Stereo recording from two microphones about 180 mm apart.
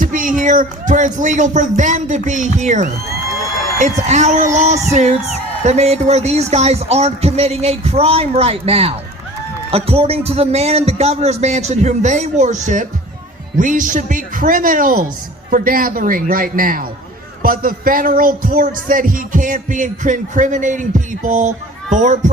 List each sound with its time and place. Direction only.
0.0 s a man's voice: 45° right (ahead or behind)